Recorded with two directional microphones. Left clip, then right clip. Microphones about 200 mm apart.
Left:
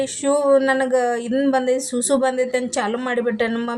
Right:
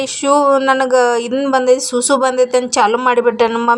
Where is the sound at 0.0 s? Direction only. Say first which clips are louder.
Right 6 dB; 25° right (ahead or behind).